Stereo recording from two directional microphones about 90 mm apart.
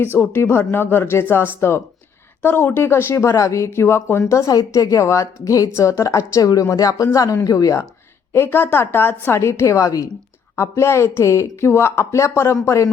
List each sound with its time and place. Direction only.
0.0 s a woman's voice: 25° left (ahead or behind)